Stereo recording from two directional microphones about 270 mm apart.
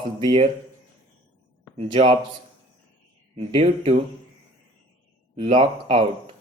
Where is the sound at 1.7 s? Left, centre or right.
Right.